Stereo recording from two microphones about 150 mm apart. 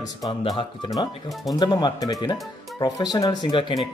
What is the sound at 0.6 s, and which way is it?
Speech, 25° left (ahead or behind).